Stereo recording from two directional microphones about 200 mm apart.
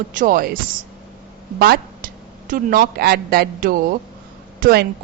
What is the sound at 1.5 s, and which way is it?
A woman's voice, 50° right (ahead or behind).